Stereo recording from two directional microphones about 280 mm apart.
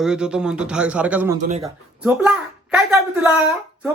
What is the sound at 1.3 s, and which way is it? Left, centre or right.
Speech, right.